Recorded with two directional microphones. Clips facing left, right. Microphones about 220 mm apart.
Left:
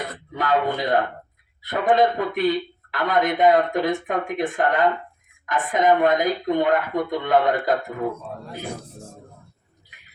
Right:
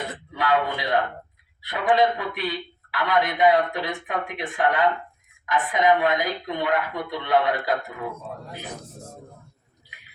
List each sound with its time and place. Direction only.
0.3 s a man's voice: 45° left (ahead or behind)